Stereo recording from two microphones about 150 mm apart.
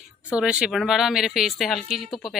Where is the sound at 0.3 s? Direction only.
5° right (ahead or behind).